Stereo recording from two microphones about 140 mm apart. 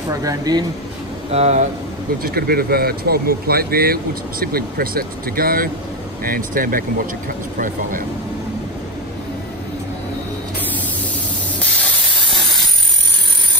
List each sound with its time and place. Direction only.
0.1 s speech: 25° right (ahead or behind)
1.3 s speech: 50° right (ahead or behind)
2.2 s speech: 90° right